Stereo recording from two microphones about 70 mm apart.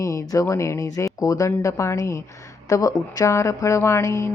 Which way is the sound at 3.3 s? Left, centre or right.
Left.